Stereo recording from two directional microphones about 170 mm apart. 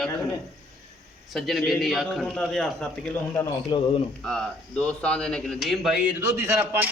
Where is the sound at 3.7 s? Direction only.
25° left (ahead or behind).